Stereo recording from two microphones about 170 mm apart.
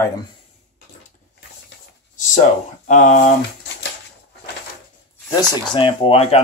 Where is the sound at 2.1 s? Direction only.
45° left (ahead or behind).